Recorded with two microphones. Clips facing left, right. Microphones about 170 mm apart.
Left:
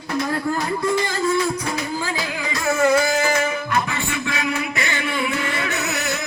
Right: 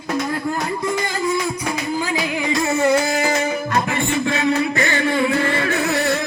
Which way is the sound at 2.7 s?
25° right (ahead or behind).